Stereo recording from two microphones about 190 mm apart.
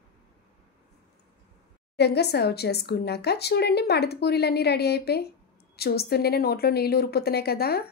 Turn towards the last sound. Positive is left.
turn(degrees=55)  # may be behind; listen again after turning